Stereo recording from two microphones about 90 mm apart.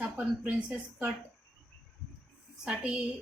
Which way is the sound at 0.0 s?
15° right (ahead or behind).